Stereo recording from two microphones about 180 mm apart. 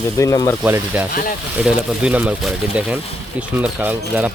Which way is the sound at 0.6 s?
10° right (ahead or behind).